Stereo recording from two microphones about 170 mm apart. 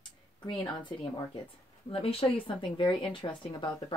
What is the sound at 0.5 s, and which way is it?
Speech, 25° left (ahead or behind).